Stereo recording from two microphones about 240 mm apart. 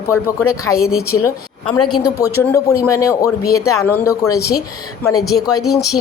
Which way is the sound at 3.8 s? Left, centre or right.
Centre.